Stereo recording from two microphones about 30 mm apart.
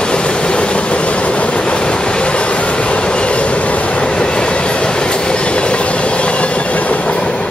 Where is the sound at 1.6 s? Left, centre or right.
Left.